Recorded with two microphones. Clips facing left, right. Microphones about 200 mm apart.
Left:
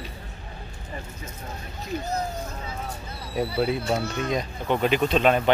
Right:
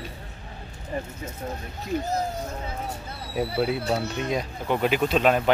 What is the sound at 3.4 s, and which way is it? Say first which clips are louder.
Speech: even; 5° right (ahead or behind).